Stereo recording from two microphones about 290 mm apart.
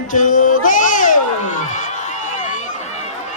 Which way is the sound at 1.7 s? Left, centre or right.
Left.